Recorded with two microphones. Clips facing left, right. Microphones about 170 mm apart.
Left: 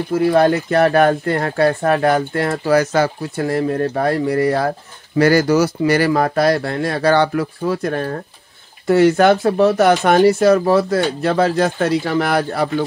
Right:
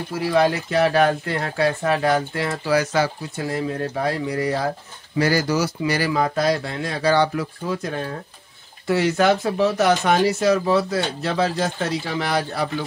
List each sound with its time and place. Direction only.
0.1 s speech: 50° left (ahead or behind)